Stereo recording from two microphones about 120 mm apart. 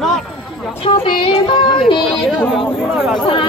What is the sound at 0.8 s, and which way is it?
Speech, 45° left (ahead or behind).